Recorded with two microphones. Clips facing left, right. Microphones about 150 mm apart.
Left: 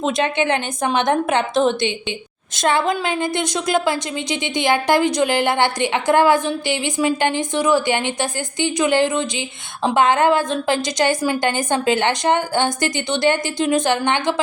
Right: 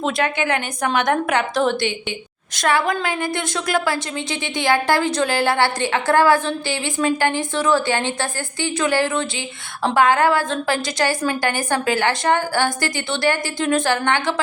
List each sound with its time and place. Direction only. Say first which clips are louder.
0.0 s a woman's voice: left 2 dB; 20° left (ahead or behind)